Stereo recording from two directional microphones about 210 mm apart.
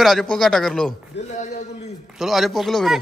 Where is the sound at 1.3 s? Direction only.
35° left (ahead or behind).